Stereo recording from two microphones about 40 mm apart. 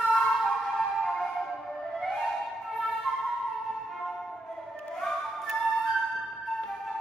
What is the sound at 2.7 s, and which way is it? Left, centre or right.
Flute, centre.